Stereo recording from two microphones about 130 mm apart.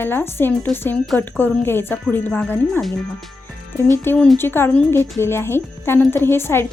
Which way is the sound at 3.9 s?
15° left (ahead or behind).